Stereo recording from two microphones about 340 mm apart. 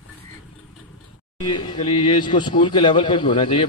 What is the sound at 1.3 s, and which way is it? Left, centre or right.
A man's voice, centre.